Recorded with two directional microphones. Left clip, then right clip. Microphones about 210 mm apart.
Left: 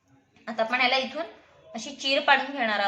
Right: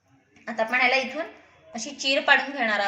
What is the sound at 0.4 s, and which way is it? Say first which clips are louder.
A woman's voice: right 2 dB; 15° right (ahead or behind).